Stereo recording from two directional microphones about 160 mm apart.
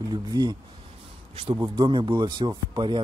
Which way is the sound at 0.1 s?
25° right (ahead or behind).